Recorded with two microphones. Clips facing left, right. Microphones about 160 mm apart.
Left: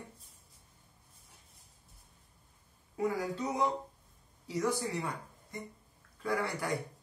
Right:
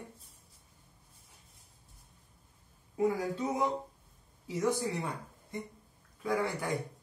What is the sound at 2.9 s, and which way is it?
Speech, 25° right (ahead or behind).